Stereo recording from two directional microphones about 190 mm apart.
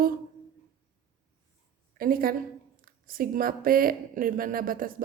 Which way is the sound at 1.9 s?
50° right (ahead or behind).